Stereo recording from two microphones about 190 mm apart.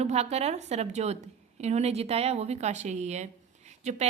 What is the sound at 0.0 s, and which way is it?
A woman's voice, 35° right (ahead or behind).